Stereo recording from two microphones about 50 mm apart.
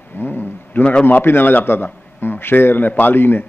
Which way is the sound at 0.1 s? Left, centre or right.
Left.